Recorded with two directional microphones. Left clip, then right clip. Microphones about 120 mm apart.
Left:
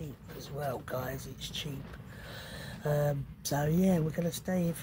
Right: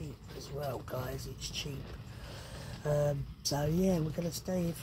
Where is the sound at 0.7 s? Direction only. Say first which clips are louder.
Left 4 dB; 15° left (ahead or behind).